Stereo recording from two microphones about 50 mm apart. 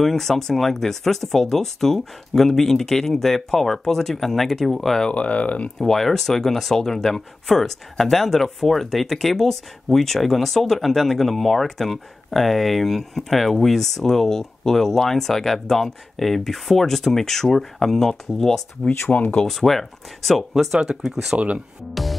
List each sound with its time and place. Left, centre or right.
0.0 s speech: centre
5.1 s speech: left
5.8 s speech: centre
19.0 s speech: left
19.4 s speech: centre
20.5 s speech: centre
21.4 s speech: right